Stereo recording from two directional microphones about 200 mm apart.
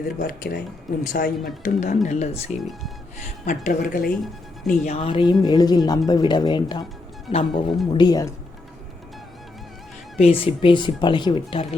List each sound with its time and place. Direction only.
0.2 s speech: 45° left (ahead or behind)
2.6 s speech: centre (ahead or behind)
3.2 s speech: 40° left (ahead or behind)
4.8 s speech: 35° left (ahead or behind)
10.2 s speech: 30° left (ahead or behind)